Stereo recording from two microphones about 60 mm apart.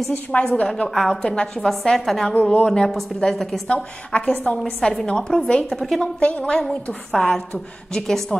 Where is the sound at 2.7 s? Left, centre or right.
Centre.